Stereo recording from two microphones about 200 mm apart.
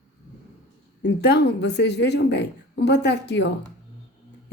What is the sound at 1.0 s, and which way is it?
Speech, 60° left (ahead or behind).